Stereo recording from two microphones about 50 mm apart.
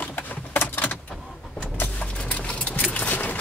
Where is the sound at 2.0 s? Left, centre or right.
Left.